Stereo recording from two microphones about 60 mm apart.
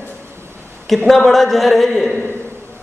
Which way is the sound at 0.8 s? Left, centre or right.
Centre.